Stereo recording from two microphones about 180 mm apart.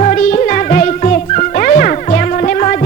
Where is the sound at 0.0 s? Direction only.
45° left (ahead or behind).